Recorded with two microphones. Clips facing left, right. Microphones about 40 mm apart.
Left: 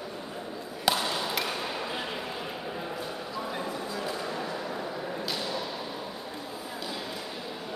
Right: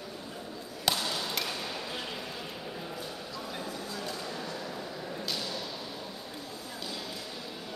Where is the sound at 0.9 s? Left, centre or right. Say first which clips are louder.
Left 4 dB; centre.